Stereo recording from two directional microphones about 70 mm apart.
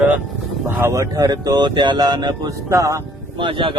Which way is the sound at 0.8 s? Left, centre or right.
Right.